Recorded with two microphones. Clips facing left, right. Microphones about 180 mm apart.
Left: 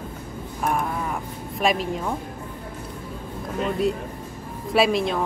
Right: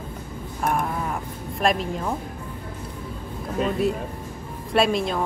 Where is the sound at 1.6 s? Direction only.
Centre (ahead or behind).